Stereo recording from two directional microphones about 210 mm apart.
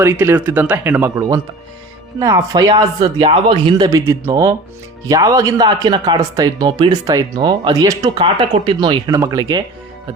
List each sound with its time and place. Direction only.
0.0 s speech: 10° right (ahead or behind)